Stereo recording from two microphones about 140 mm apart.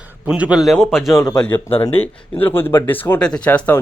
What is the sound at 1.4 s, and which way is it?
Speech, 10° left (ahead or behind).